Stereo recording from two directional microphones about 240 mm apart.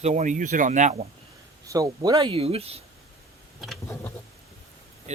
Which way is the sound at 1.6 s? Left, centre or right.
Centre.